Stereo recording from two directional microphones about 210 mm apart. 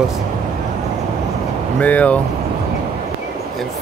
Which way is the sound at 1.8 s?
5° left (ahead or behind).